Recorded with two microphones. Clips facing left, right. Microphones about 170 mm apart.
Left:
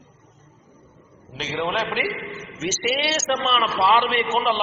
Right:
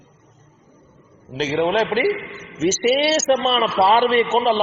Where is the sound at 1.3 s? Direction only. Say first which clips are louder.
Right 7 dB; 40° right (ahead or behind).